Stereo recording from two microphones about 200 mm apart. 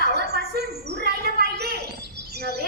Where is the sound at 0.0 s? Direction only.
55° right (ahead or behind).